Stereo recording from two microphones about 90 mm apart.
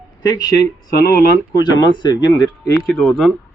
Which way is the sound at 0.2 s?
45° left (ahead or behind).